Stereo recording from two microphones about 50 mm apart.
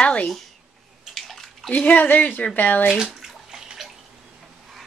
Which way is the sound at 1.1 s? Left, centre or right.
Centre.